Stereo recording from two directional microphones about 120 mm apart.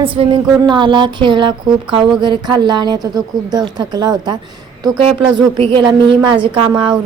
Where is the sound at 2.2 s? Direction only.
35° right (ahead or behind).